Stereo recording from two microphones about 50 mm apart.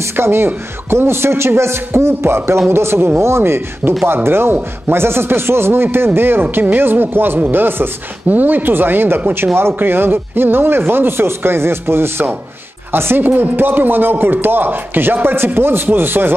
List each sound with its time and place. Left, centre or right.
0.1 s a man's voice: right